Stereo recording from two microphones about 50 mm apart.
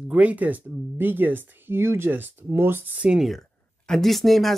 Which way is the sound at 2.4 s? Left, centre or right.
Right.